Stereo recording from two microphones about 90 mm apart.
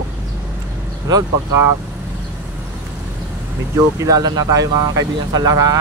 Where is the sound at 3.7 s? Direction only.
40° right (ahead or behind).